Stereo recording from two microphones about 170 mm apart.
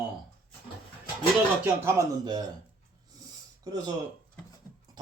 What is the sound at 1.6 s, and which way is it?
Speech, 20° right (ahead or behind).